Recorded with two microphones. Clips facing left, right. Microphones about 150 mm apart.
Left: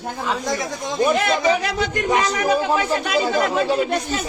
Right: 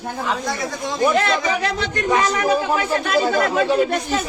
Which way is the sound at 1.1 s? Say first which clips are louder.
Even; 15° left (ahead or behind).